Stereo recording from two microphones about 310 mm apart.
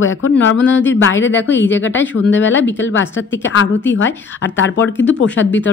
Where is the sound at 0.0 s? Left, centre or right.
Left.